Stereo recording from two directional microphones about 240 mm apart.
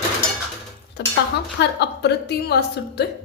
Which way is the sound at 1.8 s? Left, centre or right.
Left.